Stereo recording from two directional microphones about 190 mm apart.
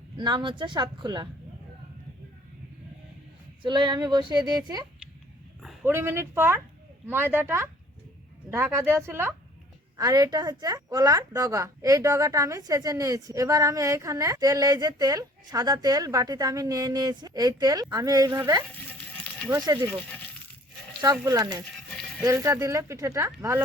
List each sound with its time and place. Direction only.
0.2 s a woman's voice: 25° right (ahead or behind)
3.6 s a woman's voice: 25° right (ahead or behind)
21.0 s a woman's voice: 20° right (ahead or behind)
21.6 s goat: 5° left (ahead or behind)
22.2 s speech: 15° right (ahead or behind)